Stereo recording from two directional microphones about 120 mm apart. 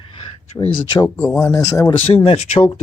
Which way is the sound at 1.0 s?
20° left (ahead or behind).